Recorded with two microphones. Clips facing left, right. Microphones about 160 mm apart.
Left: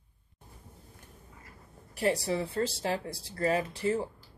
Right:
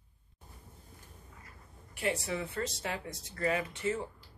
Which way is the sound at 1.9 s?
35° left (ahead or behind).